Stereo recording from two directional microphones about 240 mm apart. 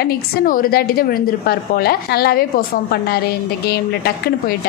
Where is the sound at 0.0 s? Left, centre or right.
Left.